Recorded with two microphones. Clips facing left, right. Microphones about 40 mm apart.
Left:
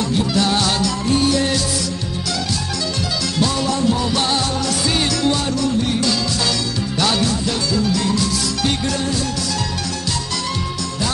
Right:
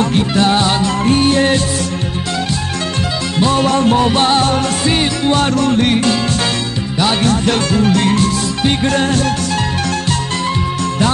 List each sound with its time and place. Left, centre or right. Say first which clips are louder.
0.0 s music: right 5 dB; right
1.0 s music: right 6 dB; right
3.3 s music: right 7 dB; right
5.4 s music: right 6 dB; right
7.2 s music: right 6 dB; right